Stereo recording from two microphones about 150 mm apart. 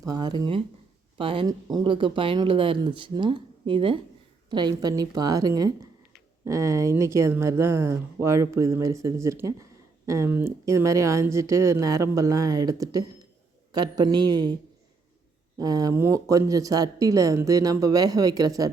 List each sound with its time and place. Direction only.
0.0 s speech: 25° right (ahead or behind)
15.5 s speech: 25° right (ahead or behind)